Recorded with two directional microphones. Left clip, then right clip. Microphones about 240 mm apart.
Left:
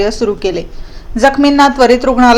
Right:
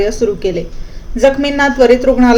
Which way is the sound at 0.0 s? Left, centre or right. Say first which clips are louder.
Even; centre.